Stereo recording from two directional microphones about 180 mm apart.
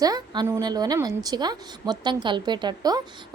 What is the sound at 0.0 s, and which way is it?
A woman's voice, 20° right (ahead or behind).